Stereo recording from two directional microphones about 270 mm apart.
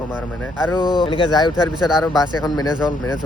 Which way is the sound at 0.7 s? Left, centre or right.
Centre.